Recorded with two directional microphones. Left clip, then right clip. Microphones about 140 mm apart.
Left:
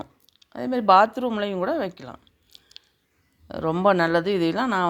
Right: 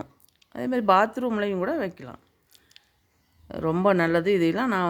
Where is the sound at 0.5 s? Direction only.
30° right (ahead or behind).